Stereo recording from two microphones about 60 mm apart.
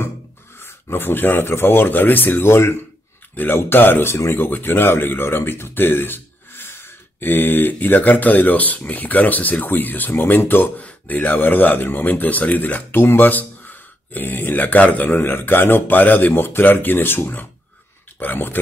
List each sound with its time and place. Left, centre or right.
0.6 s speech: left